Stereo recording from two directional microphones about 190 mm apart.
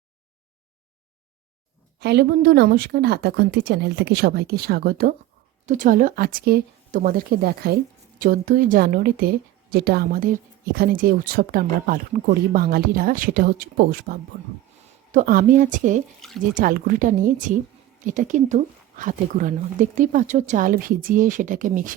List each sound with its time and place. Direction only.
2.0 s a woman's voice: 60° right (ahead or behind); by 16.0 s 40° right (ahead or behind)
16.2 s speech: centre (ahead or behind)
16.6 s speech: 50° right (ahead or behind)